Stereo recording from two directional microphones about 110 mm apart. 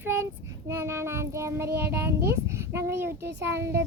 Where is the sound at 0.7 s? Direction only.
25° right (ahead or behind).